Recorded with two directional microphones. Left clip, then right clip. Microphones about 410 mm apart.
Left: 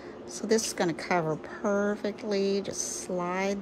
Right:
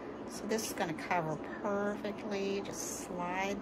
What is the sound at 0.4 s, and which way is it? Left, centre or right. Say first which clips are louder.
A woman's voice: left 9 dB; centre.